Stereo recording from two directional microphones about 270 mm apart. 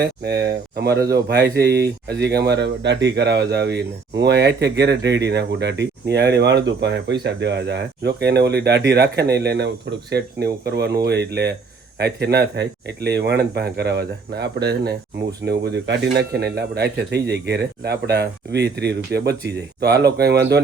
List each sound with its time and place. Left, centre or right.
0.0 s speech: right